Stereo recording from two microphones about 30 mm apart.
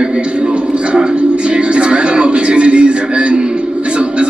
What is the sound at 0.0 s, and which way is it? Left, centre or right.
Speech, right.